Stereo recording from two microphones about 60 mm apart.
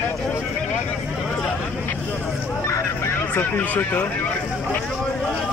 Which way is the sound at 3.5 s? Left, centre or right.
Left.